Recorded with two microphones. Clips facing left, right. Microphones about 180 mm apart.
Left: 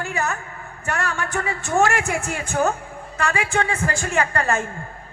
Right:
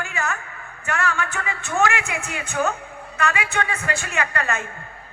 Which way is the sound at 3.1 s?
35° left (ahead or behind).